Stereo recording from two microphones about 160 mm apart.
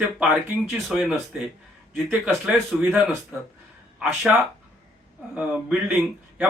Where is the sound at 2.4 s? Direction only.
5° right (ahead or behind).